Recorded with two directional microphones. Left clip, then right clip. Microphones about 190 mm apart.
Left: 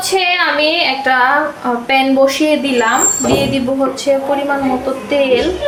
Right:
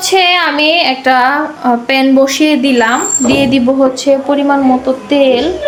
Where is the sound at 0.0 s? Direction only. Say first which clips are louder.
Right 4 dB; 60° right (ahead or behind).